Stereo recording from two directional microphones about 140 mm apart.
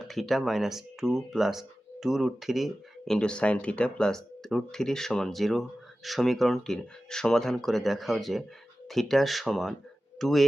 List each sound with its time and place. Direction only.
0.0 s speech: centre (ahead or behind)